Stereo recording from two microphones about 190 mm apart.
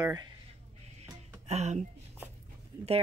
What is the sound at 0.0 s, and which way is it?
Speech, 20° right (ahead or behind).